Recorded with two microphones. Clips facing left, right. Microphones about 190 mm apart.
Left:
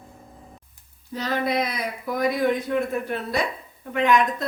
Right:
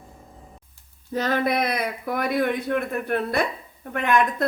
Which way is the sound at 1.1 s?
55° right (ahead or behind).